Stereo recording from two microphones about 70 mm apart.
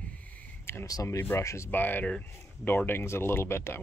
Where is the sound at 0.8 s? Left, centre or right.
Left.